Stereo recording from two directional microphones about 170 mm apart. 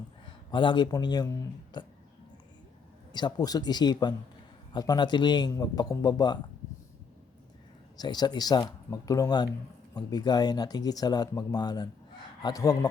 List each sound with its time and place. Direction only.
0.3 s speech: 30° left (ahead or behind)
3.1 s speech: 25° left (ahead or behind)
7.9 s speech: 25° left (ahead or behind)